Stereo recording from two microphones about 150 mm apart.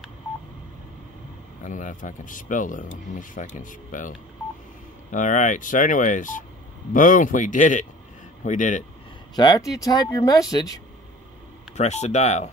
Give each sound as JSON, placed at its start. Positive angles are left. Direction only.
{"t": 1.6, "sound": "speech", "side_deg": 55}
{"t": 5.1, "sound": "speech", "side_deg": 60}
{"t": 9.3, "sound": "speech", "side_deg": 30}
{"t": 11.7, "sound": "speech", "side_deg": 50}